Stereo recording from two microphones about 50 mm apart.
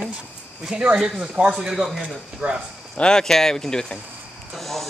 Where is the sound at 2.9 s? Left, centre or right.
Centre.